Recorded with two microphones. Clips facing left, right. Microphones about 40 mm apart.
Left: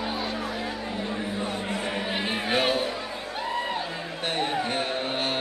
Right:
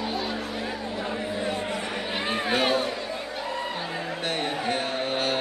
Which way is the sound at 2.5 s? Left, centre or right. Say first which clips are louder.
Even; centre.